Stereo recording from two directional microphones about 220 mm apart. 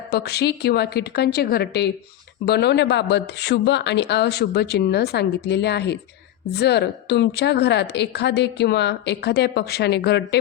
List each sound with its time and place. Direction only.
0.1 s a woman's voice: 45° left (ahead or behind)